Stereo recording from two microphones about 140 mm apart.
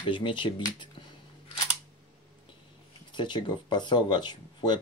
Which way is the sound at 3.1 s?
35° left (ahead or behind).